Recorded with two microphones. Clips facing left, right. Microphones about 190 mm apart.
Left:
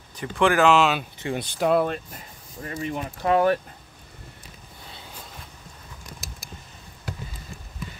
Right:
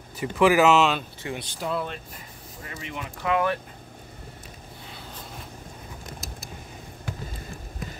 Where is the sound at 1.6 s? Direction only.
60° left (ahead or behind).